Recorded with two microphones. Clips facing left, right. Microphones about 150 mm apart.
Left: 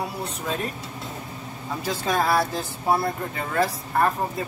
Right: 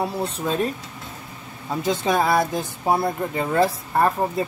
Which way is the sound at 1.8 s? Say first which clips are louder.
Right 4 dB; 20° right (ahead or behind).